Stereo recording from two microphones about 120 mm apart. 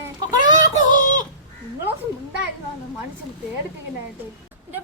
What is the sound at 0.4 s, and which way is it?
Child singing, 35° right (ahead or behind).